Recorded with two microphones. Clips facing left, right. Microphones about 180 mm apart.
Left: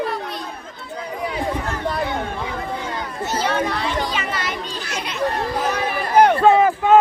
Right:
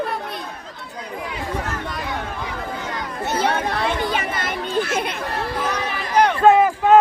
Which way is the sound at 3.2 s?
60° right (ahead or behind).